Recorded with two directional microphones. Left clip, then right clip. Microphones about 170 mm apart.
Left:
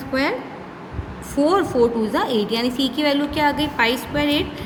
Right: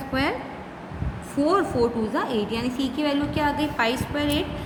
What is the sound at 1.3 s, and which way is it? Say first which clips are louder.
A woman's voice: left 4 dB; 30° left (ahead or behind).